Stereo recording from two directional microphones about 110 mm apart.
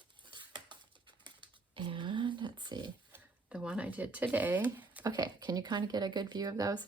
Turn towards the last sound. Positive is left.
turn(degrees=-30)  # may be behind; listen again after turning